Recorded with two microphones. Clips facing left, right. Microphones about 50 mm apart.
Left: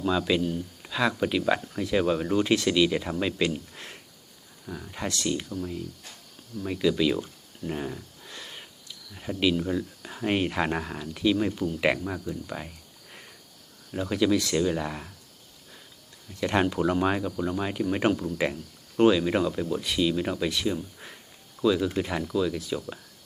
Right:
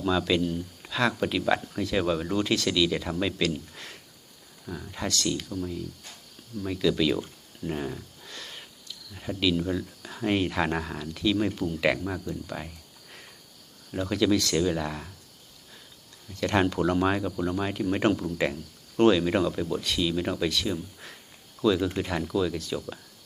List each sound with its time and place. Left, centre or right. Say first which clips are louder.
0.0 s speech: even; centre
4.6 s speech: even; centre
5.0 s speech: even; left
5.5 s speech: even; centre
8.3 s sniff: even; centre
9.1 s speech: left 1 dB; centre
11.3 s speech: even; centre
16.4 s speech: even; centre